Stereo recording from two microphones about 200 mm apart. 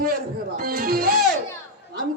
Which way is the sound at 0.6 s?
50° right (ahead or behind).